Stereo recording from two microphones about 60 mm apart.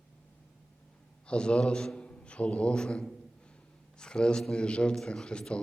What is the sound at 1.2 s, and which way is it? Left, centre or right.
A man's voice, centre.